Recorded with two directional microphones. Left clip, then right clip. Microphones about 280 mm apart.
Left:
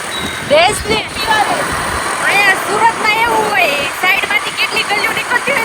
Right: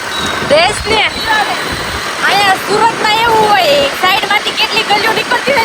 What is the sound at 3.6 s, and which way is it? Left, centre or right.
Speech, centre.